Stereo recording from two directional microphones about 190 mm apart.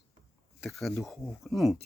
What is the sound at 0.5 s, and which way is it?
Speech, centre (ahead or behind).